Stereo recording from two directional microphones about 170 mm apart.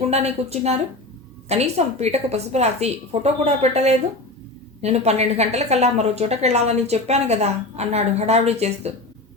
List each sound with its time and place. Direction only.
0.1 s a woman's voice: 40° right (ahead or behind)